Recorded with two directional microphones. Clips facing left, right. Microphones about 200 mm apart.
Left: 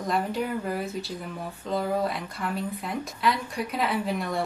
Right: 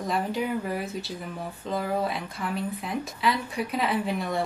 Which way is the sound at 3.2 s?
Centre (ahead or behind).